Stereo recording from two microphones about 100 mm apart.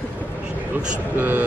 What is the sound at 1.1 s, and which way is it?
Speech, 20° right (ahead or behind).